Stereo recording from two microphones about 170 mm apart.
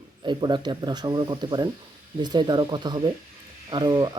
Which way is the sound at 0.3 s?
25° right (ahead or behind).